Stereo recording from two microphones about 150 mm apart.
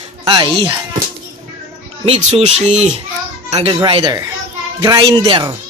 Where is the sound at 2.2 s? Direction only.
45° right (ahead or behind).